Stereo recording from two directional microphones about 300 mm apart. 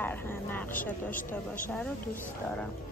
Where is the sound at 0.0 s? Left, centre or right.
Centre.